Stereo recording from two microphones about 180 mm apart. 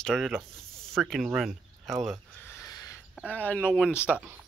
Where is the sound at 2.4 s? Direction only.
15° left (ahead or behind).